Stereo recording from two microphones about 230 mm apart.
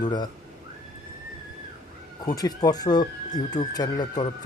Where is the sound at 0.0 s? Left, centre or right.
Centre.